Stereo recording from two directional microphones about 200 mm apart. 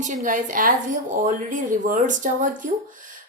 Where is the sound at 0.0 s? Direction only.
40° right (ahead or behind).